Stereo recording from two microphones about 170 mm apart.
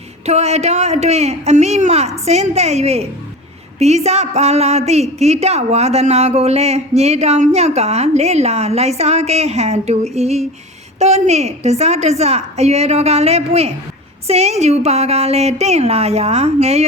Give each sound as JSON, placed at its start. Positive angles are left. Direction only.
{"t": 0.3, "sound": "a woman's voice", "side_deg": -40}